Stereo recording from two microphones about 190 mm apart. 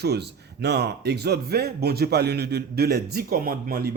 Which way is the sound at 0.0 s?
60° right (ahead or behind).